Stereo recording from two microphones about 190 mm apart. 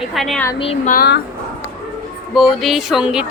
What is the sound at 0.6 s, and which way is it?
Speech, 30° left (ahead or behind).